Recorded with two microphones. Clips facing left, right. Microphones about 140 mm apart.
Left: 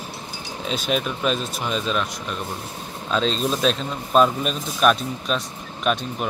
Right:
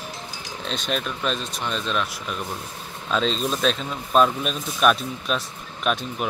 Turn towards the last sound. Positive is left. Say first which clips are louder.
# left 2 dB
turn(degrees=0)  # may be behind; listen again after turning